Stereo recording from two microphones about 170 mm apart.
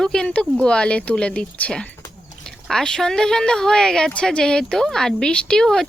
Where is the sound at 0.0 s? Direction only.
5° left (ahead or behind).